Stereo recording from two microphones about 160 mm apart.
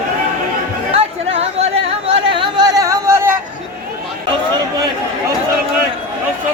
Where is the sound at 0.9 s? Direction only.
40° right (ahead or behind).